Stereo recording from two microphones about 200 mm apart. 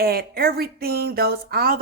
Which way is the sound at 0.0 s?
50° right (ahead or behind).